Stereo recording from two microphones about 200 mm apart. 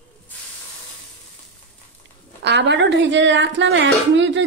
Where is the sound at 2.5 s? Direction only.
60° right (ahead or behind).